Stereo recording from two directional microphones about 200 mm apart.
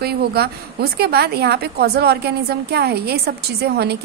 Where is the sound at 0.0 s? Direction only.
50° right (ahead or behind).